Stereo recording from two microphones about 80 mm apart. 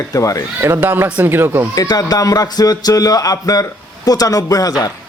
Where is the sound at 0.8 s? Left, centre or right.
Right.